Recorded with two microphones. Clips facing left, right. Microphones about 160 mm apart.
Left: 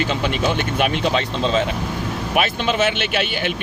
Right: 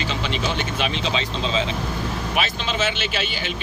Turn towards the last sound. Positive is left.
turn(degrees=60)  # may be behind; listen again after turning